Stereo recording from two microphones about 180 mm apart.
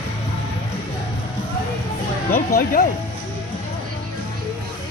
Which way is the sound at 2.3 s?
55° left (ahead or behind).